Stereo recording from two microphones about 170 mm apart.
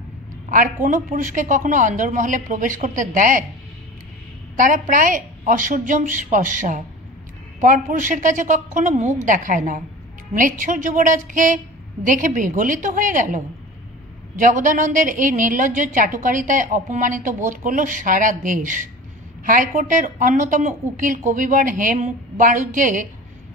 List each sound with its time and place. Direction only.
0.8 s a woman's voice: 50° right (ahead or behind)
4.6 s a woman's voice: 50° right (ahead or behind)
14.4 s a woman's voice: 50° right (ahead or behind)